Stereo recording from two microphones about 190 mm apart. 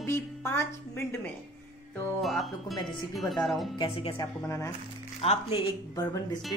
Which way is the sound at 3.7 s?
30° left (ahead or behind).